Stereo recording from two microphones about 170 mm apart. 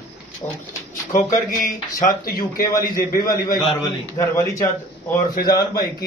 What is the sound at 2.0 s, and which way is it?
Speech, 55° left (ahead or behind).